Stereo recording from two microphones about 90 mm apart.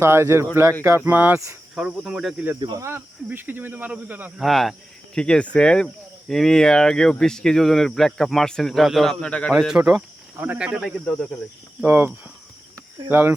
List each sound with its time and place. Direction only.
0.0 s speech: 30° right (ahead or behind)
1.0 s speech: 20° right (ahead or behind)
1.7 s speech: 5° right (ahead or behind)
2.7 s speech: 30° right (ahead or behind)
4.4 s speech: centre (ahead or behind)
9.5 s speech: 5° right (ahead or behind)
10.3 s speech: 20° right (ahead or behind)
10.6 s speech: 10° right (ahead or behind)
11.0 s speech: 5° left (ahead or behind)
11.9 s speech: 25° right (ahead or behind)